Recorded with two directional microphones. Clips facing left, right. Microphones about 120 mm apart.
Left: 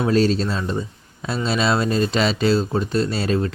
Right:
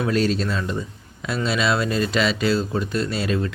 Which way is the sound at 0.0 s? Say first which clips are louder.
Left 3 dB; 30° left (ahead or behind).